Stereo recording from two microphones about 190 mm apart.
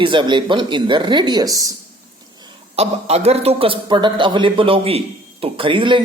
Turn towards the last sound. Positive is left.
turn(degrees=-25)  # may be behind; listen again after turning